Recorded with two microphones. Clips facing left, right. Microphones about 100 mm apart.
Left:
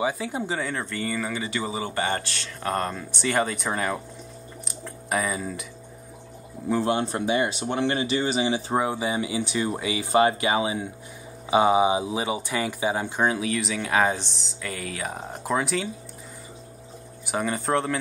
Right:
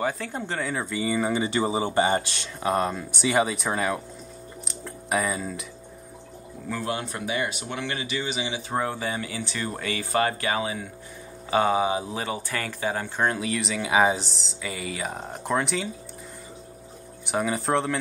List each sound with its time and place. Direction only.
0.0 s speech: 5° left (ahead or behind); by 1.2 s 10° right (ahead or behind)
1.2 s speech: 25° right (ahead or behind); by 5.7 s centre (ahead or behind)
6.7 s speech: 30° left (ahead or behind)
8.7 s speech: 15° left (ahead or behind)
13.3 s speech: centre (ahead or behind)
17.3 s speech: centre (ahead or behind)